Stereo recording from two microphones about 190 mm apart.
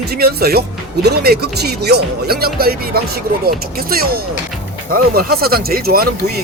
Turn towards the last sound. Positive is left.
turn(degrees=-55)  # may be behind; listen again after turning